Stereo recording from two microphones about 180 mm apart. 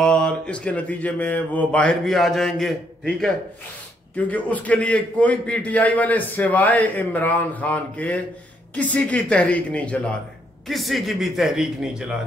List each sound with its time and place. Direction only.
0.0 s a man's voice: 5° left (ahead or behind)